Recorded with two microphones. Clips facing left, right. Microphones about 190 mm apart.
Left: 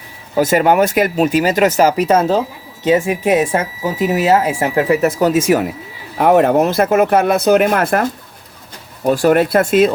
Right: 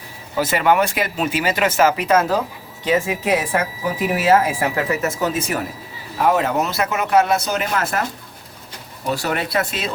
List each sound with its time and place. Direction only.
0.3 s a woman's voice: 45° left (ahead or behind); by 5.1 s 25° left (ahead or behind)
6.1 s speech: 60° left (ahead or behind)
9.0 s speech: 50° left (ahead or behind)